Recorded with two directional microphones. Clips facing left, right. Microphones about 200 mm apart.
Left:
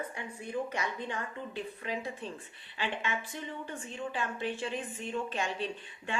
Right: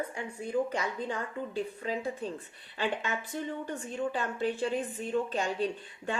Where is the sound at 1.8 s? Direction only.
40° right (ahead or behind).